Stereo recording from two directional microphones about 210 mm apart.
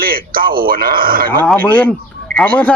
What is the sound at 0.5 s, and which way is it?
Speech, 45° right (ahead or behind).